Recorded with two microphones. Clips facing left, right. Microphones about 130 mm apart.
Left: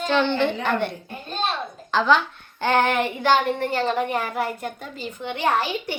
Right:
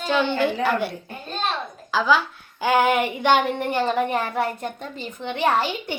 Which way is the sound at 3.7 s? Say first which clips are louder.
Right 1 dB; 20° right (ahead or behind).